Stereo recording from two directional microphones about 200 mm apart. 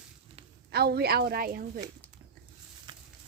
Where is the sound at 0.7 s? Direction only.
50° right (ahead or behind).